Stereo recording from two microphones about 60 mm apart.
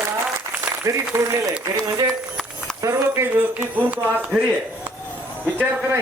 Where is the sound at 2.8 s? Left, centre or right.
Right.